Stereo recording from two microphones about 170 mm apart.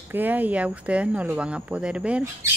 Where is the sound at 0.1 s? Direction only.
10° right (ahead or behind).